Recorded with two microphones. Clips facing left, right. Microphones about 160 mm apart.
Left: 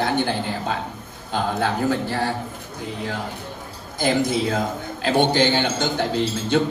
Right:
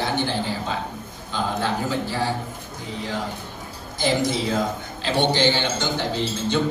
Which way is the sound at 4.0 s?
55° left (ahead or behind).